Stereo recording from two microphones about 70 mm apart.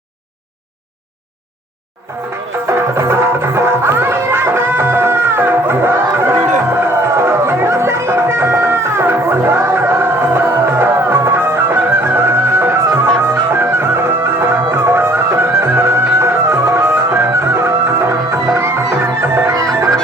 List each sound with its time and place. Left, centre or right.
2.1 s music: right
19.5 s music: right